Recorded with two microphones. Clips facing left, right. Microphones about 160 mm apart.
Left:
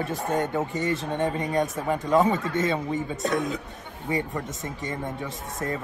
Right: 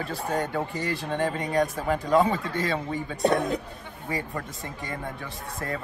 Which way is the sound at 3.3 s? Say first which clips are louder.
Right 4 dB; 30° right (ahead or behind).